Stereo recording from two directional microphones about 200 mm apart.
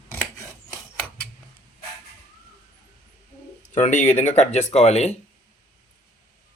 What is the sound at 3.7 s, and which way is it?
Speech, 40° left (ahead or behind).